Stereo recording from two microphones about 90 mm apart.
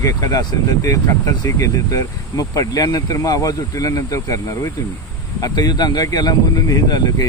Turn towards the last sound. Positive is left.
turn(degrees=45)  # may be behind; listen again after turning